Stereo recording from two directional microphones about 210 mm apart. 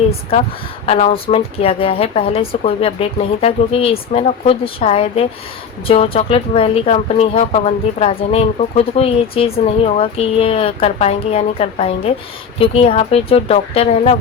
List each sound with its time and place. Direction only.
0.9 s speech: 30° left (ahead or behind)